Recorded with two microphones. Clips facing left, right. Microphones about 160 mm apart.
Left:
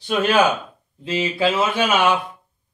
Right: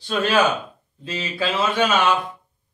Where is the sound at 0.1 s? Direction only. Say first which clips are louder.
Left 2 dB; 10° left (ahead or behind).